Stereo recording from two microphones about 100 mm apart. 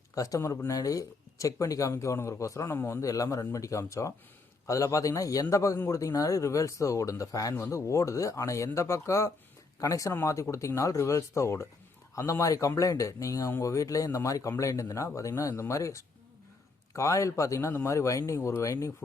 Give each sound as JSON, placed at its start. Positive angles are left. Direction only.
{"t": 0.1, "sound": "speech", "side_deg": 35}